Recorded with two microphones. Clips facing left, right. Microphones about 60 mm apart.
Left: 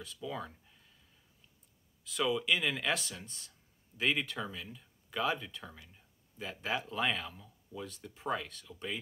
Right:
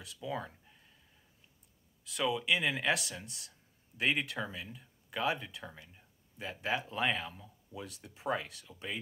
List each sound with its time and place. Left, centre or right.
0.2 s speech: centre
2.1 s speech: centre